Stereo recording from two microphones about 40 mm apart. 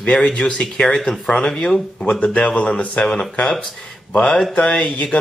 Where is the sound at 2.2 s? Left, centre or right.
Left.